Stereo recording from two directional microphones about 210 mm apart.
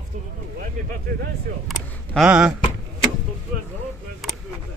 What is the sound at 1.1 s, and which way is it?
Speech, 40° right (ahead or behind).